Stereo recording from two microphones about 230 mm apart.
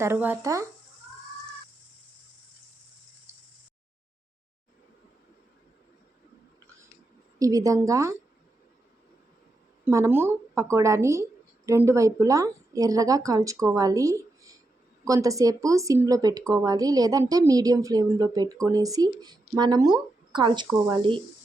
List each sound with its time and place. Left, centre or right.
0.0 s a woman's voice: centre
7.3 s a woman's voice: centre
9.8 s a woman's voice: centre
20.7 s a woman's voice: centre